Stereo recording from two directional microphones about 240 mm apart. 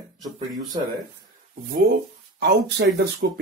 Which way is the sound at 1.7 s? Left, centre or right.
Right.